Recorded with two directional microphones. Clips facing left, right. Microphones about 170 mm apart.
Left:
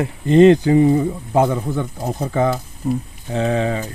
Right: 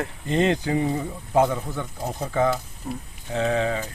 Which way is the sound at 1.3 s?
35° left (ahead or behind).